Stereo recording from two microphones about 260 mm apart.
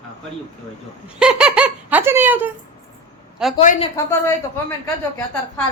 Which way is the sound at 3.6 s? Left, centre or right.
Left.